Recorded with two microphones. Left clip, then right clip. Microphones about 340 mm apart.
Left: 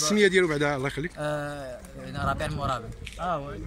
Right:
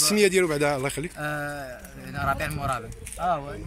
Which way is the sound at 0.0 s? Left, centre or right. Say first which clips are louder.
Right 1 dB; centre.